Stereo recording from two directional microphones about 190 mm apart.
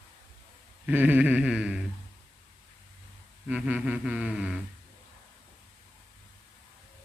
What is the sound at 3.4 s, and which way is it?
Speech, 5° right (ahead or behind).